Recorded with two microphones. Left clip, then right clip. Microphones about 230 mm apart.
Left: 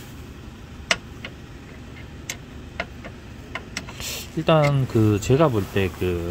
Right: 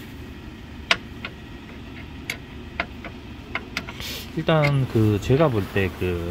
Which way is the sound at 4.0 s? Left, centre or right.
Centre.